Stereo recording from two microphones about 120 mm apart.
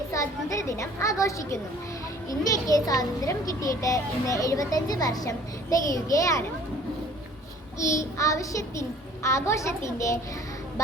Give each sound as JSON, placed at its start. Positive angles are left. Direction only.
{"t": 0.1, "sound": "a child's voice", "side_deg": 25}
{"t": 7.8, "sound": "a child's voice", "side_deg": 25}